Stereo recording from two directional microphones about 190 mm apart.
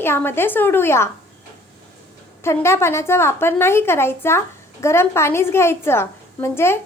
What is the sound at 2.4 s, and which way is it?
A child's voice, 15° left (ahead or behind).